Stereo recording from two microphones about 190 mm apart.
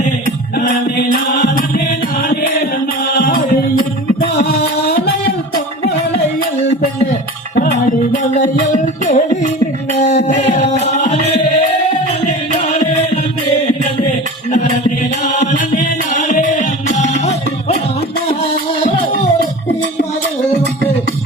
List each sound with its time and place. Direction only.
1.3 s music: 50° left (ahead or behind)
8.1 s music: 45° left (ahead or behind)
9.9 s a sound: 35° left (ahead or behind)
10.2 s music: 40° left (ahead or behind)
14.5 s chant: 35° left (ahead or behind)